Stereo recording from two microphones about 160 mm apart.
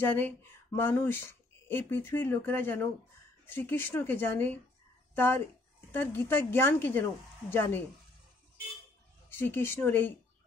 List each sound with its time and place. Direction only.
0.0 s speech: 15° left (ahead or behind)
9.4 s speech: 15° left (ahead or behind)